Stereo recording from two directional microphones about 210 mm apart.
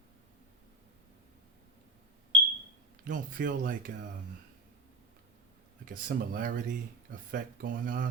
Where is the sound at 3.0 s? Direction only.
40° right (ahead or behind).